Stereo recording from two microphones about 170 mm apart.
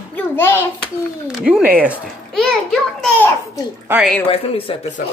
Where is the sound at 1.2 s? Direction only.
5° right (ahead or behind).